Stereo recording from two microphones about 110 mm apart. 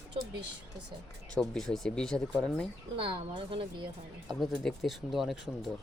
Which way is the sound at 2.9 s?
50° right (ahead or behind).